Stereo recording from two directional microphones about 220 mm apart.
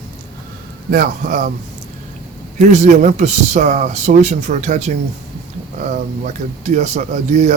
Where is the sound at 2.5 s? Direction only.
30° right (ahead or behind).